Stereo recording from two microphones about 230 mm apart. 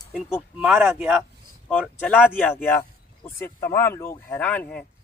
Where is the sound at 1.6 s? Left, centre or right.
Centre.